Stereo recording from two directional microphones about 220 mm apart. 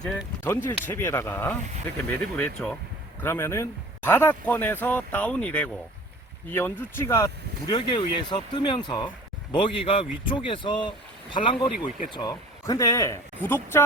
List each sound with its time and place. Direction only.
0.0 s speech: 5° left (ahead or behind)